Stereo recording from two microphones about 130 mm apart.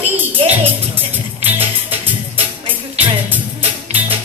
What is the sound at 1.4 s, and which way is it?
Music, 50° right (ahead or behind).